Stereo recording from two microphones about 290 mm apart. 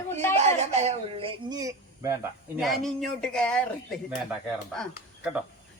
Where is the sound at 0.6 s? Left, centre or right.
Right.